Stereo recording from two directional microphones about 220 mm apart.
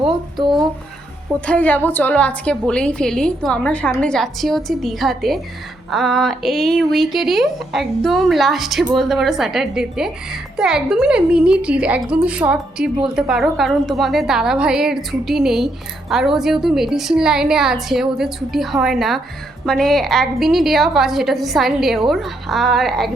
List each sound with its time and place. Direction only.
0.3 s speech: 20° right (ahead or behind)
1.5 s a woman's voice: 5° left (ahead or behind)